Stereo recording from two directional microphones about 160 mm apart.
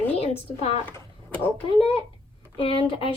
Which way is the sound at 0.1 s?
40° left (ahead or behind).